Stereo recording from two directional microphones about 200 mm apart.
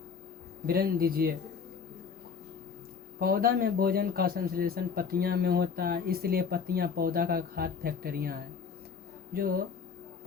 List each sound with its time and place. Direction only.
0.7 s speech: 50° right (ahead or behind)
3.2 s speech: 45° right (ahead or behind)